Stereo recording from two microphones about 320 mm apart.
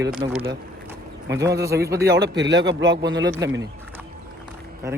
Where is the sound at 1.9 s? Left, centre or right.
Right.